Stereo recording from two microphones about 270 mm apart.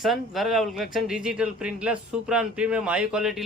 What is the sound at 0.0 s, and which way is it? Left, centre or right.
A man's voice, centre.